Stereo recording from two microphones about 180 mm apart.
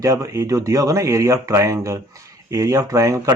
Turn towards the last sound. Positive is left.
turn(degrees=-15)  # may be behind; listen again after turning